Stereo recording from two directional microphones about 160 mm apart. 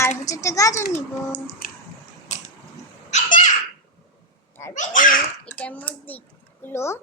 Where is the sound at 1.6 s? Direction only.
70° left (ahead or behind).